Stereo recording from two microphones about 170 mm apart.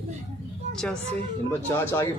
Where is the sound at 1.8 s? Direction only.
20° left (ahead or behind).